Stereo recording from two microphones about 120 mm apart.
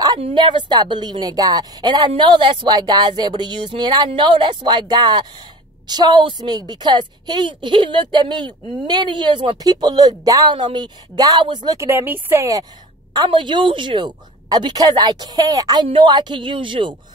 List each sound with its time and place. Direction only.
0.2 s a woman's voice: 45° right (ahead or behind)
11.9 s speech: 20° right (ahead or behind)
13.1 s a woman's voice: 35° right (ahead or behind)